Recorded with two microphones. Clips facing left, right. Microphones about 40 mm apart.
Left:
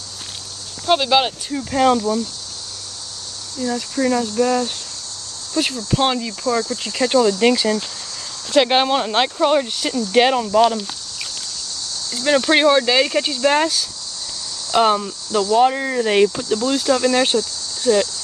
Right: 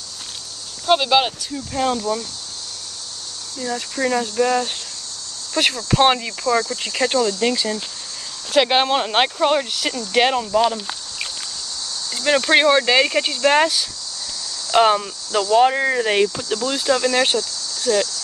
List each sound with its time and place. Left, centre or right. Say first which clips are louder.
0.8 s speech: even; centre
1.7 s speech: left 6 dB; left
3.5 s speech: left 3 dB; centre
5.9 s cricket: right 4 dB; right
6.5 s speech: right 1 dB; left
7.1 s speech: left 5 dB; centre
7.5 s speech: left 4 dB; centre
8.6 s speech: left 1 dB; centre
10.1 s speech: left 2 dB; centre
12.1 s speech: even; centre
16.1 s speech: left 3 dB; centre
16.5 s speech: right 1 dB; centre
17.4 s a sound: left 2 dB; left